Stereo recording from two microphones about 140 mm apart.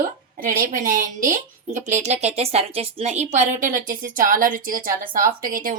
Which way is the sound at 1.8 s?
60° right (ahead or behind).